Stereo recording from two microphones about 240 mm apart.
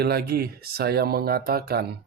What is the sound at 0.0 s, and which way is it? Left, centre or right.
Speech, right.